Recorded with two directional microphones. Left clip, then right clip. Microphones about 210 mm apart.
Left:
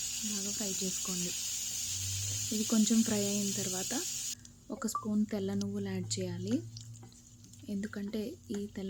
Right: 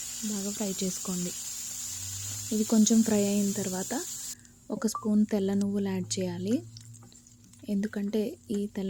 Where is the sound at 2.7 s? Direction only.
25° right (ahead or behind).